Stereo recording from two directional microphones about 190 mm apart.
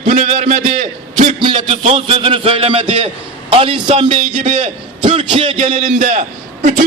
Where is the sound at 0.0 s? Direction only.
40° right (ahead or behind).